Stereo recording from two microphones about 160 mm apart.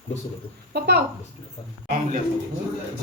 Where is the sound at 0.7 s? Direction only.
90° right.